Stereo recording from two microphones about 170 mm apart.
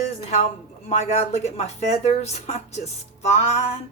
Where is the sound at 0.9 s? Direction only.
40° left (ahead or behind).